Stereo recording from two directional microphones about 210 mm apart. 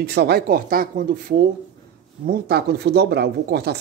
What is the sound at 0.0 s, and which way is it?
Speech, 50° right (ahead or behind).